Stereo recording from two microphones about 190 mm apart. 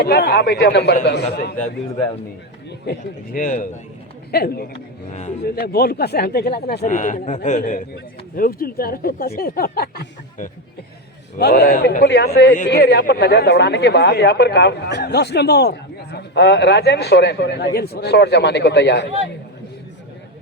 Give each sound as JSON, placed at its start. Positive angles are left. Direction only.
{"t": 0.0, "sound": "speech", "side_deg": 55}
{"t": 2.8, "sound": "speech", "side_deg": 50}